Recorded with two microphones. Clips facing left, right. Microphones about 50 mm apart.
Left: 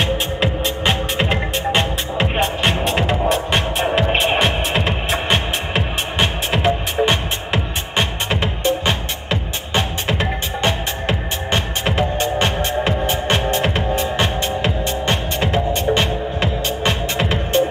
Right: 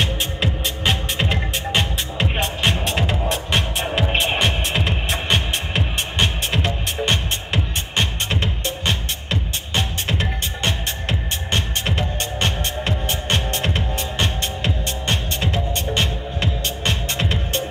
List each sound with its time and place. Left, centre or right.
0.0 s music: centre